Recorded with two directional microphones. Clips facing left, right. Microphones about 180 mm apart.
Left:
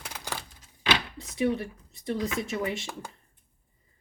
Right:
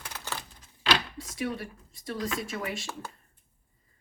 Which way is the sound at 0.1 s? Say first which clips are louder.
Left 1 dB; 15° left (ahead or behind).